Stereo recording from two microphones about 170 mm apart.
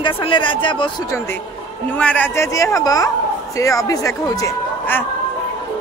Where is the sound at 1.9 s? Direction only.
5° left (ahead or behind).